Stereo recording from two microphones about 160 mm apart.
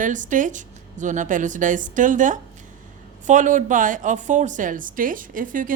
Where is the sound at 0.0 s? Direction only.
50° right (ahead or behind).